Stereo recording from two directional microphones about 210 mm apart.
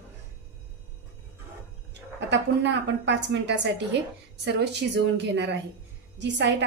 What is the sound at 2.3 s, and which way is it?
A woman's voice, 55° right (ahead or behind).